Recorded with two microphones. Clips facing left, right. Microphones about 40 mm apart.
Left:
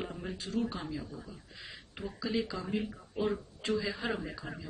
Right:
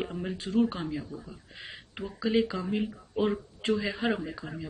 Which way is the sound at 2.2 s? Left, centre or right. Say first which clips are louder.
Right 7 dB; right.